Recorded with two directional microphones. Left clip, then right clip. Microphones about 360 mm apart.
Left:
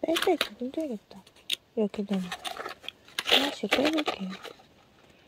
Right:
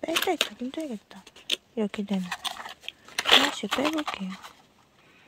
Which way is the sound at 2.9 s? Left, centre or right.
Centre.